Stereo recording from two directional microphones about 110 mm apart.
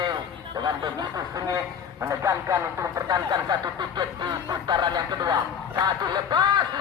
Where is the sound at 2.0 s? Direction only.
25° right (ahead or behind).